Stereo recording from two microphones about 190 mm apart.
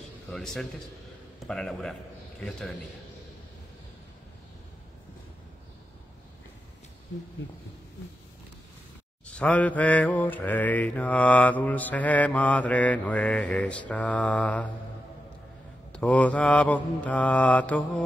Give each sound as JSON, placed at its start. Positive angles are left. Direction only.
{"t": 0.3, "sound": "a man's voice", "side_deg": 5}
{"t": 9.3, "sound": "mantra", "side_deg": 5}
{"t": 15.9, "sound": "mantra", "side_deg": 5}